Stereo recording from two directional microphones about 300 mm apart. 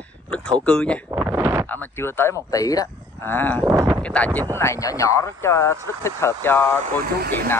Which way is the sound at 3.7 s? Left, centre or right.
Centre.